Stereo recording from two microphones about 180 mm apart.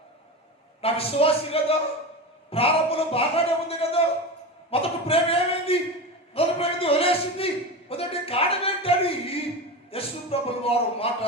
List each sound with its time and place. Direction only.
0.8 s a man's voice: 35° left (ahead or behind)